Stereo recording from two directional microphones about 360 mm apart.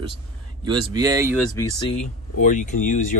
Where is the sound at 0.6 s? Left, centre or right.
Centre.